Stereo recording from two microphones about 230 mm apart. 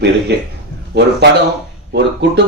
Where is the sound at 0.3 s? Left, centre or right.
Right.